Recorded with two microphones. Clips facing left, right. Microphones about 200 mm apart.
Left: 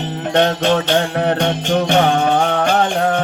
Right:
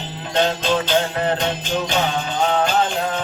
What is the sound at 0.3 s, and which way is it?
Music, 70° left (ahead or behind).